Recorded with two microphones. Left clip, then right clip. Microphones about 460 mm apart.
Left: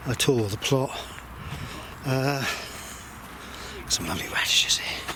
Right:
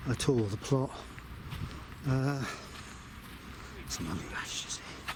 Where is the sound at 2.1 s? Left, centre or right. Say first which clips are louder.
Left 8 dB; centre.